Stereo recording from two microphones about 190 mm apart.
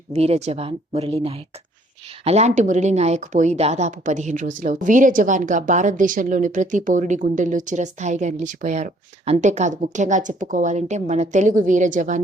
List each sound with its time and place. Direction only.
0.1 s speech: 35° right (ahead or behind)